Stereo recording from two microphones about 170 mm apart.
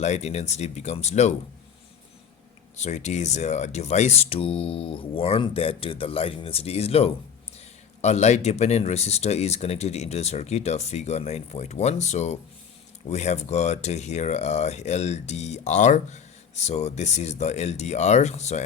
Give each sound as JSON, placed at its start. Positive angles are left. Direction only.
{"t": 0.0, "sound": "speech", "side_deg": 40}
{"t": 2.7, "sound": "speech", "side_deg": 40}